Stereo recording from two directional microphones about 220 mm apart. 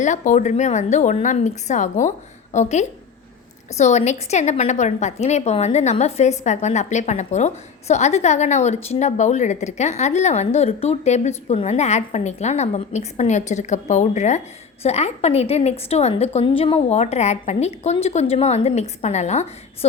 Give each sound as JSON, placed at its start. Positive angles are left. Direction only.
{"t": 0.0, "sound": "a woman's voice", "side_deg": 35}